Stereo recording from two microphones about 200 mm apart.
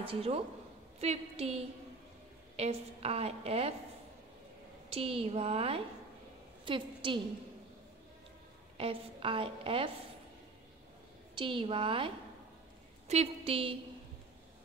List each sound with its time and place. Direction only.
0.1 s a woman's voice: 30° right (ahead or behind)
4.8 s a woman's voice: 30° right (ahead or behind)
8.7 s a woman's voice: 25° right (ahead or behind)
11.3 s a woman's voice: 25° right (ahead or behind)
13.1 s a woman's voice: 30° right (ahead or behind)